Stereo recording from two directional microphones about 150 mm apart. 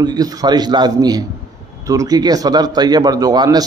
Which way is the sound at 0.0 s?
25° right (ahead or behind).